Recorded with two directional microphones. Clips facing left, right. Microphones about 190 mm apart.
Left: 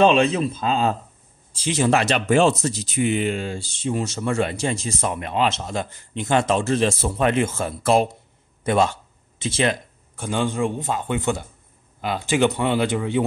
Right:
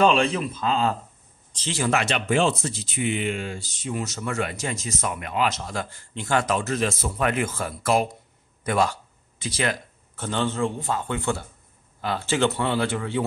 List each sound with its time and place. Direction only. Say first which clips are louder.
0.0 s speech: left 3 dB; 20° left (ahead or behind)
1.5 s speech: left 6 dB; 10° left (ahead or behind)
1.8 s speech: left 4 dB; 30° left (ahead or behind)
10.1 s a man's voice: left 3 dB; 10° left (ahead or behind)